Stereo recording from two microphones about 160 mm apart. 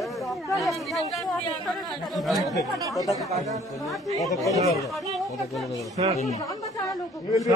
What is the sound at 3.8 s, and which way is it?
Speech, centre (ahead or behind).